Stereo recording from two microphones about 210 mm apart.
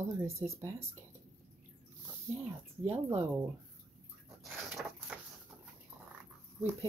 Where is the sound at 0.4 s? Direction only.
10° right (ahead or behind).